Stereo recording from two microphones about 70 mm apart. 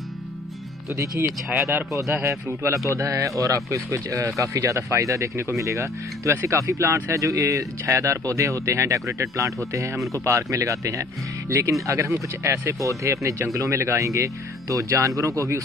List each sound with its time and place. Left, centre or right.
1.2 s speech: right
2.2 s speech: right